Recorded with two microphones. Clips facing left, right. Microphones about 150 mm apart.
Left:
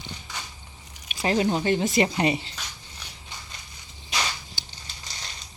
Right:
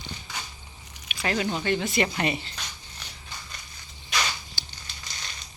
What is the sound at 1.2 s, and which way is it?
Speech, 30° left (ahead or behind).